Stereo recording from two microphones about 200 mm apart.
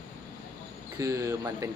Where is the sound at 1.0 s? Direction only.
15° right (ahead or behind).